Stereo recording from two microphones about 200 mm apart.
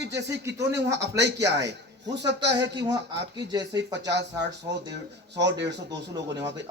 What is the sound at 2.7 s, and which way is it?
Speech, 20° right (ahead or behind).